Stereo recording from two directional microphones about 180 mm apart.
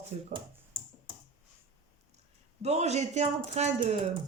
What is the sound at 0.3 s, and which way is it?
Finger snapping, 25° right (ahead or behind).